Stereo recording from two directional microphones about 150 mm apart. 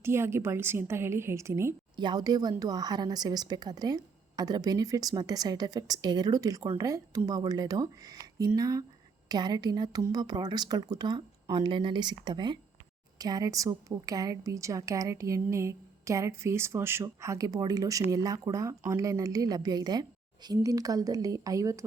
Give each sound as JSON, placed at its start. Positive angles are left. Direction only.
{"t": 0.0, "sound": "a woman's voice", "side_deg": -15}
{"t": 2.0, "sound": "a woman's voice", "side_deg": -30}